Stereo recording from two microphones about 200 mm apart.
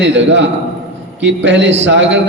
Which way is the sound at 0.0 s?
65° right (ahead or behind).